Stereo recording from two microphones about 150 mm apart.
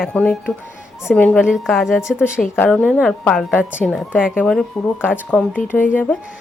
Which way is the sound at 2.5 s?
10° left (ahead or behind).